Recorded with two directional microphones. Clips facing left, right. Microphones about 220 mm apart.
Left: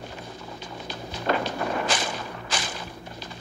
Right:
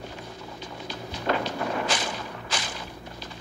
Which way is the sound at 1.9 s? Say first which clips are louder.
Left 1 dB; 50° left (ahead or behind).